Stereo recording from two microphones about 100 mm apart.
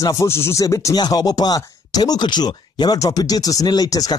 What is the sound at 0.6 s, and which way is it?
Speech, 35° left (ahead or behind).